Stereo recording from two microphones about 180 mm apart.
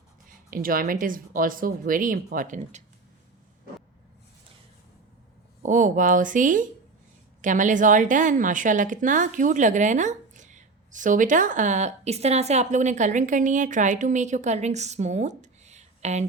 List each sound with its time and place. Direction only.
0.3 s a woman's voice: 50° right (ahead or behind)
5.6 s a woman's voice: 45° right (ahead or behind)